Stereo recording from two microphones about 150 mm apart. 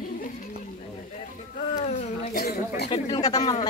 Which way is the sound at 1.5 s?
55° left (ahead or behind).